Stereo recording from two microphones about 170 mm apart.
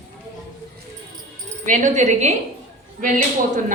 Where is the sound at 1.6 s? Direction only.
45° right (ahead or behind).